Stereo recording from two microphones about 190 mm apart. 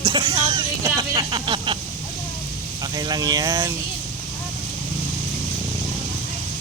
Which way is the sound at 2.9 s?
20° right (ahead or behind).